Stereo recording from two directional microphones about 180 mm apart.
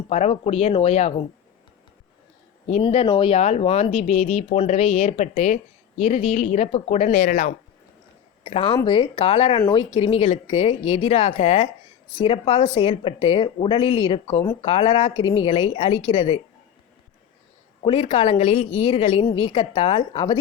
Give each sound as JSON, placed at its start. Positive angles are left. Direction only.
{"t": 0.1, "sound": "speech", "side_deg": 35}
{"t": 2.6, "sound": "speech", "side_deg": 35}
{"t": 8.4, "sound": "a woman's voice", "side_deg": 30}
{"t": 17.8, "sound": "a woman's voice", "side_deg": 30}